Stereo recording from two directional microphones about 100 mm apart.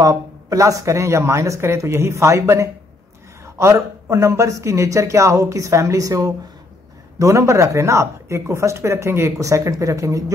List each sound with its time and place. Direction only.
0.0 s a woman's voice: 35° right (ahead or behind)